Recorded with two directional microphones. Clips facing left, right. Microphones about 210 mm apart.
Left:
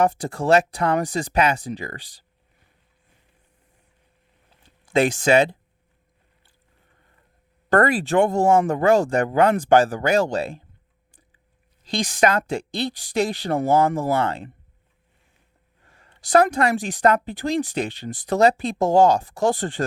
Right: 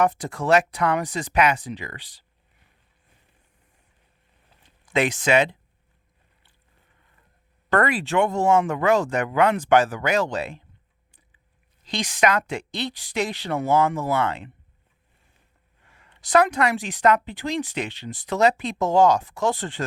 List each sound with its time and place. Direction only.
0.0 s speech: 30° left (ahead or behind)
4.9 s speech: 30° left (ahead or behind)
7.8 s speech: 30° left (ahead or behind)
11.9 s speech: 30° left (ahead or behind)
16.0 s a sound: 35° left (ahead or behind)
16.8 s speech: 35° left (ahead or behind)